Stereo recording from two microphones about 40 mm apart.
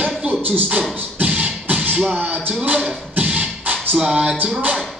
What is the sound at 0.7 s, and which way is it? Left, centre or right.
Music, right.